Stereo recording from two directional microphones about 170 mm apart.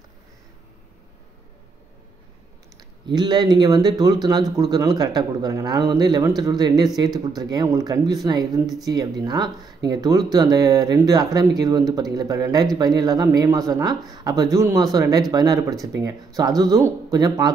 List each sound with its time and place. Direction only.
3.2 s speech: 25° right (ahead or behind)